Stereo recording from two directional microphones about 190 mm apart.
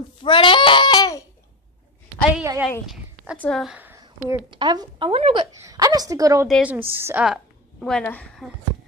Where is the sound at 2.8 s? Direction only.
Centre (ahead or behind).